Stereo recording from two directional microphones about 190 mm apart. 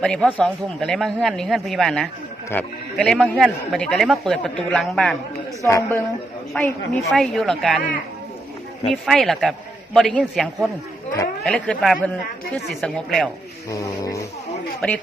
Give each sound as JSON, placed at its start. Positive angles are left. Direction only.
{"t": 0.0, "sound": "speech", "side_deg": 5}
{"t": 5.6, "sound": "speech", "side_deg": 15}
{"t": 8.9, "sound": "speech", "side_deg": 0}
{"t": 13.7, "sound": "speech", "side_deg": 15}